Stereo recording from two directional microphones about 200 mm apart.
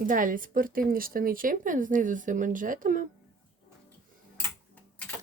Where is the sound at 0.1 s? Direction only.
45° right (ahead or behind).